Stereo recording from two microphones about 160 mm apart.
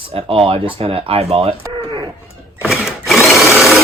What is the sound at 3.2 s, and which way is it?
Sewing machine, centre (ahead or behind).